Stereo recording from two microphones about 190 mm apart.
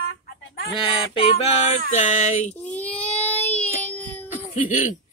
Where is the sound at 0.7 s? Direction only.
30° left (ahead or behind).